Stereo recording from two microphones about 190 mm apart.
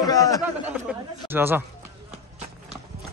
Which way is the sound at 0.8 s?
10° right (ahead or behind).